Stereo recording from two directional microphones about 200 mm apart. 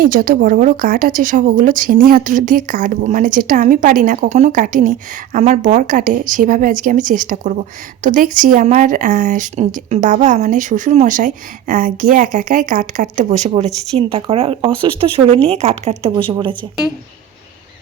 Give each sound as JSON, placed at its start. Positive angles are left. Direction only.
{"t": 0.0, "sound": "speech", "side_deg": -45}